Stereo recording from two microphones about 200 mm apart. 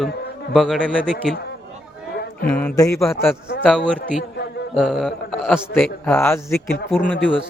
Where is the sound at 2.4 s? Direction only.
10° left (ahead or behind).